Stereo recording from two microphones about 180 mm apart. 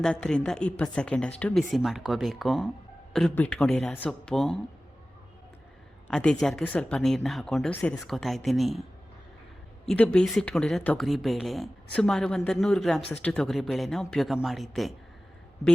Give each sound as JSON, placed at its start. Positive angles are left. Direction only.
{"t": 0.0, "sound": "speech", "side_deg": 5}
{"t": 6.1, "sound": "a woman's voice", "side_deg": 5}
{"t": 13.0, "sound": "speech", "side_deg": 35}
{"t": 13.2, "sound": "speech", "side_deg": 5}